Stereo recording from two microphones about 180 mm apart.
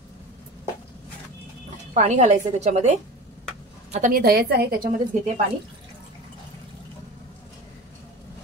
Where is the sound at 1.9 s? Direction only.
40° right (ahead or behind).